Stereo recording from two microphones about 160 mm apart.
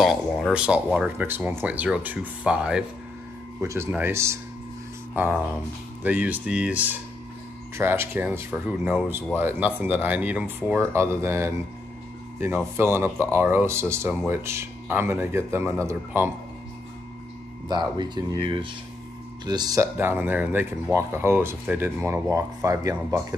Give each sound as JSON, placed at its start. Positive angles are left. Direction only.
{"t": 0.0, "sound": "speech", "side_deg": 0}
{"t": 17.6, "sound": "speech", "side_deg": -25}